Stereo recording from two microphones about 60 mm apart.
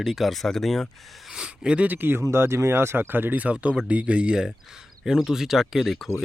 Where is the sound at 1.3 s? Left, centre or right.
Centre.